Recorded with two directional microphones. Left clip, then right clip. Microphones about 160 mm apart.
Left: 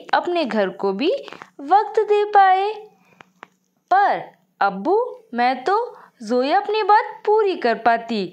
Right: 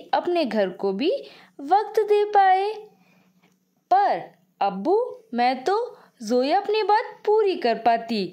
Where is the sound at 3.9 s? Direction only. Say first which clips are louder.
Left 3 dB; 10° right (ahead or behind).